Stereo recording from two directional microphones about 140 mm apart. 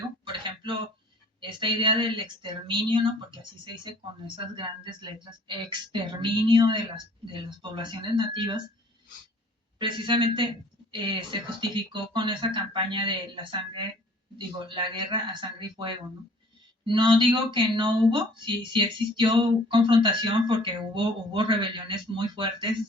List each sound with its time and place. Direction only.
0.3 s a sound: 35° right (ahead or behind)
1.4 s speech: 35° right (ahead or behind)
4.5 s speech: 35° right (ahead or behind)
9.7 s speech: 35° right (ahead or behind)